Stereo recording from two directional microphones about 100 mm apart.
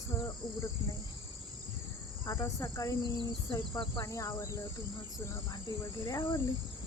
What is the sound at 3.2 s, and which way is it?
Speech, 55° left (ahead or behind).